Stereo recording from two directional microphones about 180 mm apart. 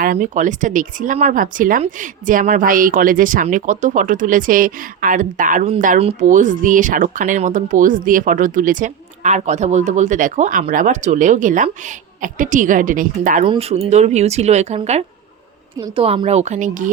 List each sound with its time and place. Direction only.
0.0 s speech: 50° right (ahead or behind)
13.4 s speech: 30° right (ahead or behind)